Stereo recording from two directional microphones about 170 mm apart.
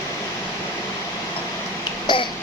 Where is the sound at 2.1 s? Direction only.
25° left (ahead or behind).